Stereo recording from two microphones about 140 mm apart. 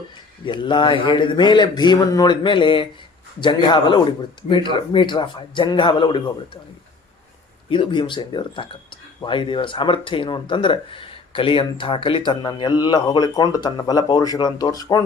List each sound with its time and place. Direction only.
0.4 s speech: 35° left (ahead or behind)
7.7 s speech: 35° left (ahead or behind)